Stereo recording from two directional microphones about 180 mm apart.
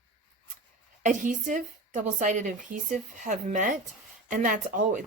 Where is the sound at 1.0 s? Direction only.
45° right (ahead or behind).